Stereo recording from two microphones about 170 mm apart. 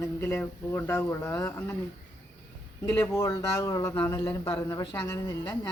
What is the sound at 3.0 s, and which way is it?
Speech, 15° left (ahead or behind).